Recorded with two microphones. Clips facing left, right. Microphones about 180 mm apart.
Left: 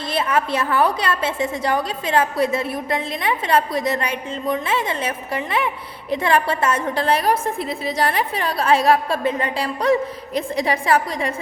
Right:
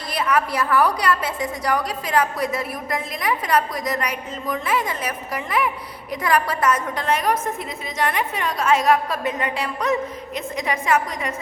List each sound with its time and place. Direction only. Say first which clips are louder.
0.1 s a woman's voice: left 1 dB; 25° left (ahead or behind)